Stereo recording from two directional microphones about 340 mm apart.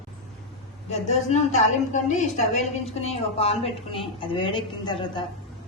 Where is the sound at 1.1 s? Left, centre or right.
Centre.